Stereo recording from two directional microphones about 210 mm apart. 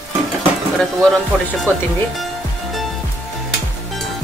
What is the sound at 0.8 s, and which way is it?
Speech, centre (ahead or behind).